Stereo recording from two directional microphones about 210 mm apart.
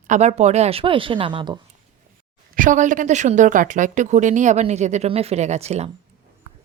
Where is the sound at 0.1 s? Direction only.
35° right (ahead or behind).